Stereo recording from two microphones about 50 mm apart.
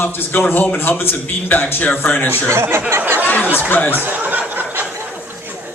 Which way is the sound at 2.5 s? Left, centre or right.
Right.